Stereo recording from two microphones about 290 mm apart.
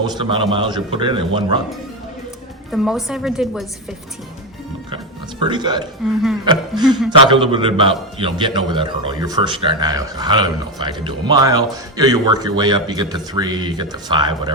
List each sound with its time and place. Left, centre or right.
0.0 s a man's voice: centre
2.7 s a woman's voice: centre
5.5 s a man's voice: centre